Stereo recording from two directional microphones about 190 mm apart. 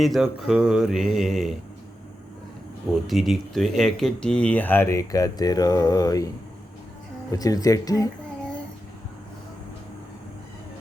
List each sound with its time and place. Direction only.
0.0 s speech: centre (ahead or behind)
3.1 s speech: centre (ahead or behind); by 8.1 s 20° left (ahead or behind)